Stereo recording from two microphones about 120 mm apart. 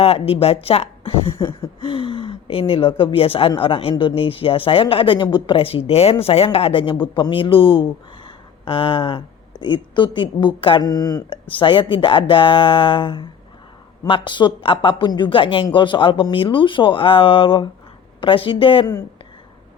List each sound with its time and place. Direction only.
0.0 s speech: 55° left (ahead or behind); by 11.3 s 30° left (ahead or behind)
11.4 s speech: 45° left (ahead or behind)